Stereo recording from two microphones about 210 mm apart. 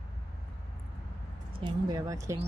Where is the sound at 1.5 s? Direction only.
25° right (ahead or behind).